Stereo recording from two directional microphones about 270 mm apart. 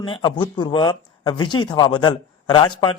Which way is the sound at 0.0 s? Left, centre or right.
Centre.